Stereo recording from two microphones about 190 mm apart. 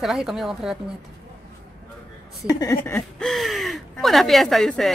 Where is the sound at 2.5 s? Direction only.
20° left (ahead or behind).